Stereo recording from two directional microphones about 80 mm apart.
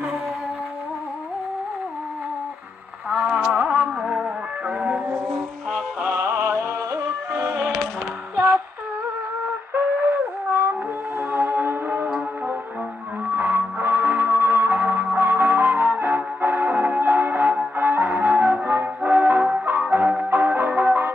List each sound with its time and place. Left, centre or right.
3.1 s music: centre
5.3 s music: centre
6.0 s music: right
7.4 s music: right
8.4 s female singing: right
9.8 s a sound: right
11.1 s music: right